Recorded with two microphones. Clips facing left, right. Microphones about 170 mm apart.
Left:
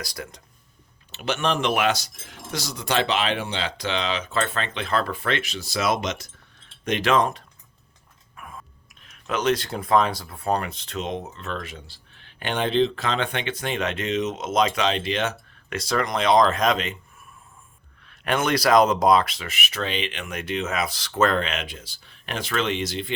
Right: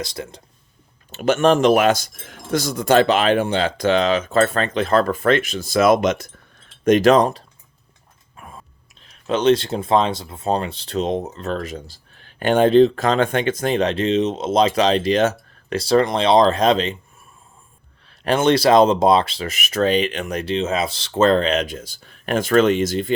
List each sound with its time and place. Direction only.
0.0 s speech: 25° right (ahead or behind)
1.1 s speech: 45° right (ahead or behind)
6.8 s speech: 40° right (ahead or behind)
18.0 s speech: 30° right (ahead or behind)